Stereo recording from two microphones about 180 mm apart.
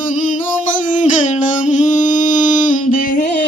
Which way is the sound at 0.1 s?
45° left (ahead or behind).